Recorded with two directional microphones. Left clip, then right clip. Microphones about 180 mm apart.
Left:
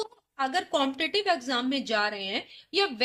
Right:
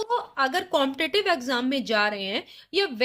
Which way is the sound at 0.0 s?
40° right (ahead or behind).